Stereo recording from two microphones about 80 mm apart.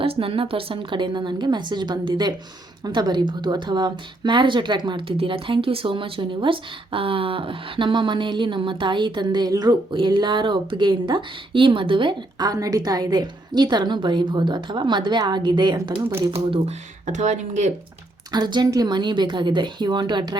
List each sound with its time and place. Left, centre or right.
0.2 s a woman's voice: right
9.9 s a woman's voice: right
12.5 s a woman's voice: right
18.3 s a woman's voice: right